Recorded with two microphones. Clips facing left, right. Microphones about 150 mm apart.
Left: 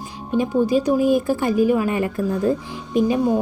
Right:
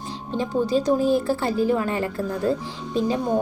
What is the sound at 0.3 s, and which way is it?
A woman's voice, 15° left (ahead or behind).